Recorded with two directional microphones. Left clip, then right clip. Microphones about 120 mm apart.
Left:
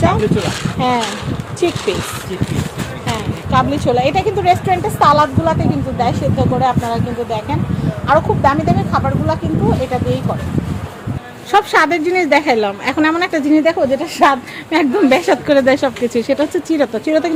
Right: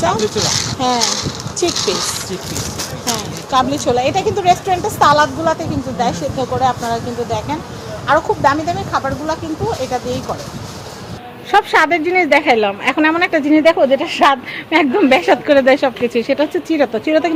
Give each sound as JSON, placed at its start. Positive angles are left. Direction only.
{"t": 0.8, "sound": "a woman's voice", "side_deg": 25}
{"t": 3.5, "sound": "a woman's voice", "side_deg": 15}
{"t": 11.5, "sound": "a woman's voice", "side_deg": 25}
{"t": 14.7, "sound": "a woman's voice", "side_deg": 25}